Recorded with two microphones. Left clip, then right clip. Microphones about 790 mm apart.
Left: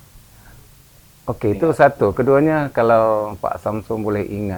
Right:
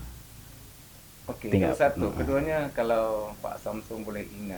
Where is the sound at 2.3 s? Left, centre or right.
Left.